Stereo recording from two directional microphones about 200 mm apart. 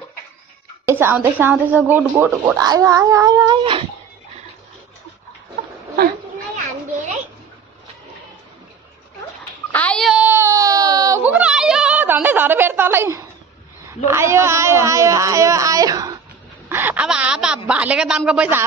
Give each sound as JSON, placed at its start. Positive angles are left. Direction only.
{"t": 0.8, "sound": "speech", "side_deg": -10}
{"t": 9.7, "sound": "baby cry", "side_deg": 5}
{"t": 14.0, "sound": "speech", "side_deg": -15}
{"t": 16.6, "sound": "a sound", "side_deg": -10}
{"t": 17.6, "sound": "a man's voice", "side_deg": -5}